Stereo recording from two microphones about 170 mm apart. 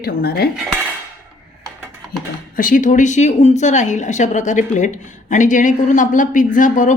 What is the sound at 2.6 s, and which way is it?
A woman's voice, 50° left (ahead or behind).